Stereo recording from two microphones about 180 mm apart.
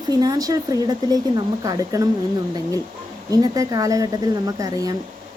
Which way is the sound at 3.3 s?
20° right (ahead or behind).